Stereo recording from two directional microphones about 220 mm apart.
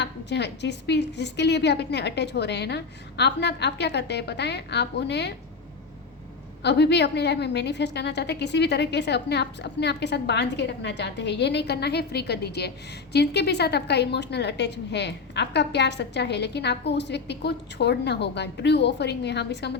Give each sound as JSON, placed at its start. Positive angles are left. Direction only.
{"t": 0.0, "sound": "a woman's voice", "side_deg": 50}
{"t": 6.6, "sound": "a woman's voice", "side_deg": 50}